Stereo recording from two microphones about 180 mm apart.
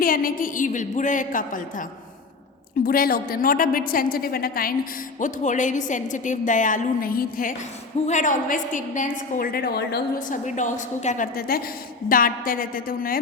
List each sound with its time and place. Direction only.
0.0 s a woman's voice: 50° left (ahead or behind)
2.8 s a woman's voice: 55° left (ahead or behind)
5.2 s a woman's voice: 45° left (ahead or behind)